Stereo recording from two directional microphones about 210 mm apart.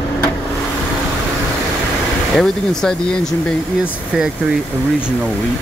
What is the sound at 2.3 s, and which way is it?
Speech, centre (ahead or behind).